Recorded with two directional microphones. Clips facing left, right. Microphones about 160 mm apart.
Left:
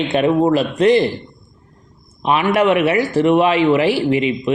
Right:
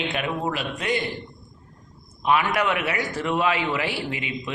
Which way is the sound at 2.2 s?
25° left (ahead or behind).